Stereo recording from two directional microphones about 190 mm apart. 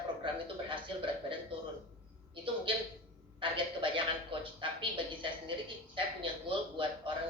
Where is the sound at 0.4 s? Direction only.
25° right (ahead or behind).